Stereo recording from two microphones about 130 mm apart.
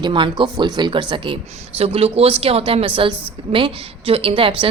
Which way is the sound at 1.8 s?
50° right (ahead or behind).